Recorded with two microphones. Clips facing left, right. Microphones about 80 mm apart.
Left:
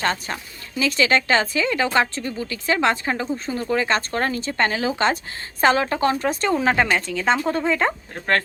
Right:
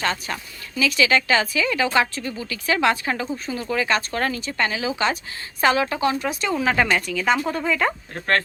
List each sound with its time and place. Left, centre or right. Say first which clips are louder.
0.0 s speech: left 1 dB; left